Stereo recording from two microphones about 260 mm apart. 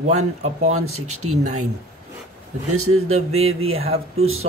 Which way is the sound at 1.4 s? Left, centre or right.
Right.